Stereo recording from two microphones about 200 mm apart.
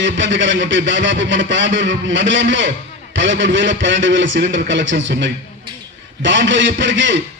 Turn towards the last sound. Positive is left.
turn(degrees=-65)  # may be behind; listen again after turning